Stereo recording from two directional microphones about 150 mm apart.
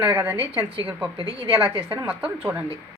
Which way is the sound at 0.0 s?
15° right (ahead or behind).